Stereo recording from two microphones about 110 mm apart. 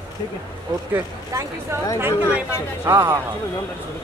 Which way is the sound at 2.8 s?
25° right (ahead or behind).